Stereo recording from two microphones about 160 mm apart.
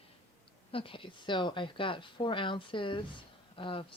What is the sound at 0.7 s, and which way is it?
Speech, 35° left (ahead or behind).